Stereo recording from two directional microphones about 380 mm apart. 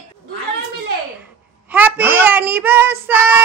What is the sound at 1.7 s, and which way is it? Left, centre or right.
A woman's voice, centre.